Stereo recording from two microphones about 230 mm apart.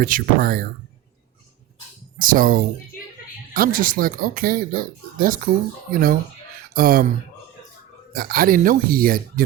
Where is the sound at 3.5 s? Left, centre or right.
Right.